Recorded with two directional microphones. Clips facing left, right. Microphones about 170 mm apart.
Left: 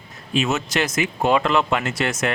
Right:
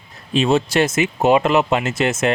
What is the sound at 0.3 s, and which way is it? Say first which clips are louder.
Speech: right 6 dB; 30° right (ahead or behind).